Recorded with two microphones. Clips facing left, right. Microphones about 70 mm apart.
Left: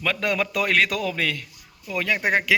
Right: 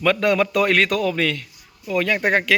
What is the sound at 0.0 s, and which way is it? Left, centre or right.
Speech, centre.